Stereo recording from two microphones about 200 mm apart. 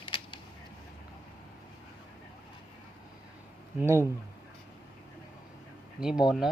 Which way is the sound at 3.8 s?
15° right (ahead or behind).